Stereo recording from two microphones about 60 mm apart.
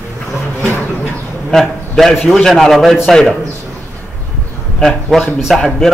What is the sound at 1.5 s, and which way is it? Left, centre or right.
Speech, centre.